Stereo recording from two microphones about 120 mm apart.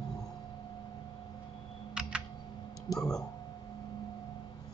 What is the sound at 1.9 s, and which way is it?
Typing, 5° right (ahead or behind).